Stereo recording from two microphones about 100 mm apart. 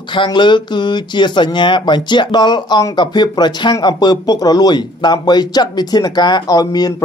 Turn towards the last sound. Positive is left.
turn(degrees=40)  # may be behind; listen again after turning